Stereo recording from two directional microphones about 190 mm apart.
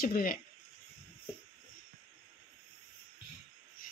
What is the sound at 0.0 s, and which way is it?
Speech, 50° left (ahead or behind).